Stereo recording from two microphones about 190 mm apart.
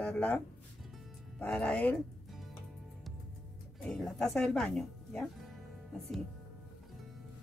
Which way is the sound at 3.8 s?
Centre (ahead or behind).